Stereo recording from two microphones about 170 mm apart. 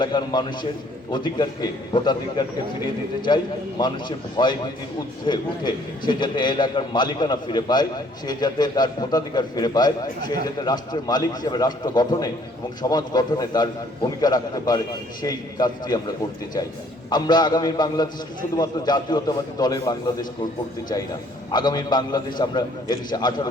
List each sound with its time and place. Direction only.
0.0 s a man's voice: 25° left (ahead or behind)
17.1 s a man's voice: 25° left (ahead or behind)
21.5 s a man's voice: 25° left (ahead or behind)